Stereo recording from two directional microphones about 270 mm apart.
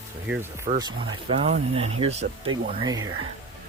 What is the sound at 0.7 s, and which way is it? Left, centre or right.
Speech, centre.